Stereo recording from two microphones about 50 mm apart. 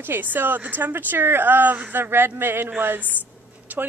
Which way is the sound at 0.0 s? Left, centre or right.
Right.